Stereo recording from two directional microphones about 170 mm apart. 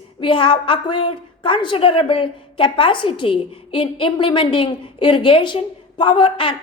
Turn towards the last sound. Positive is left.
turn(degrees=30)  # may be behind; listen again after turning